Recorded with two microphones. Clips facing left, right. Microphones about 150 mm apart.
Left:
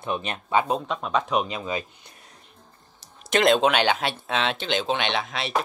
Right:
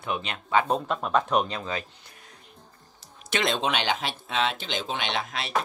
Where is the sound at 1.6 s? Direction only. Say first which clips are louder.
Left 3 dB; 15° left (ahead or behind).